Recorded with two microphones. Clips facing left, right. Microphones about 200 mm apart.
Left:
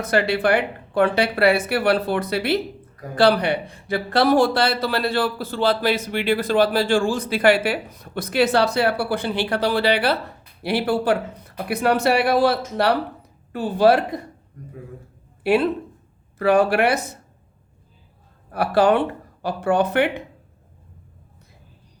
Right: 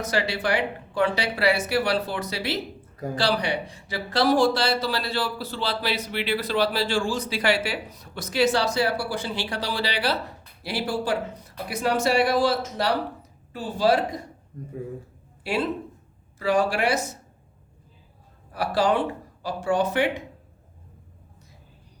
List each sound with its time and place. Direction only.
0.0 s a man's voice: 55° left (ahead or behind)
14.5 s speech: 25° right (ahead or behind)
15.4 s a man's voice: 60° left (ahead or behind)
18.5 s speech: 60° left (ahead or behind)